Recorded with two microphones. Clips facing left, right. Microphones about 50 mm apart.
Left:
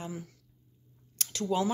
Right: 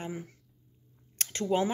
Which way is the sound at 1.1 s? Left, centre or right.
Right.